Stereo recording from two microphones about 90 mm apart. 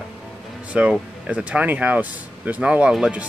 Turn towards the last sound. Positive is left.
turn(degrees=-10)  # may be behind; listen again after turning